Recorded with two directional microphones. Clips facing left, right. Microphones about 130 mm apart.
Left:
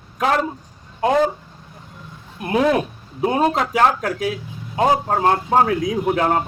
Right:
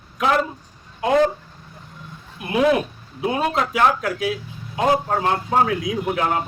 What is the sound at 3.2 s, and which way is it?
A man's voice, 40° left (ahead or behind).